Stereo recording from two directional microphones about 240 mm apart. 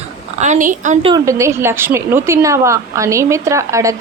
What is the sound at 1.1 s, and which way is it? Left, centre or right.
A woman's voice, centre.